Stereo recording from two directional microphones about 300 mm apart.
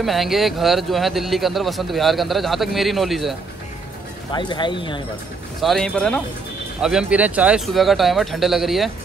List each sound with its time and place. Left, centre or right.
0.0 s speech: centre
4.3 s speech: centre
5.6 s speech: centre